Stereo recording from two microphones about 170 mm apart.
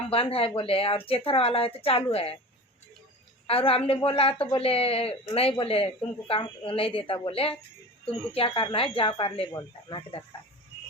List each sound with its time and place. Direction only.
0.1 s speech: 35° left (ahead or behind)
3.4 s speech: 35° left (ahead or behind)